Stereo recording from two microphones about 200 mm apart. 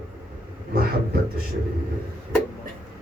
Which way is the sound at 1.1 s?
50° right (ahead or behind).